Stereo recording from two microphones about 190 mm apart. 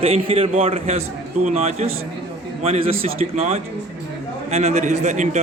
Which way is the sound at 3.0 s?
35° right (ahead or behind).